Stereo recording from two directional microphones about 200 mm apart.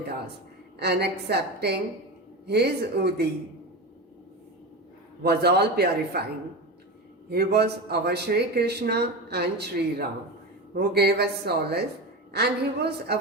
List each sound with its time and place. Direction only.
0.8 s speech: 55° right (ahead or behind)
5.2 s speech: 55° right (ahead or behind)
7.3 s speech: 55° right (ahead or behind)